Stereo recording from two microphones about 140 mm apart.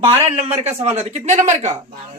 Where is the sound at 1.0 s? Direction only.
55° right (ahead or behind).